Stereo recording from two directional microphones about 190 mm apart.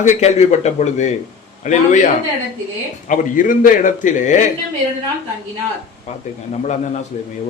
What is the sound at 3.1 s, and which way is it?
A man's voice, 45° left (ahead or behind).